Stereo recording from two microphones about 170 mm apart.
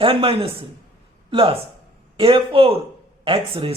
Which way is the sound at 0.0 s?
30° right (ahead or behind).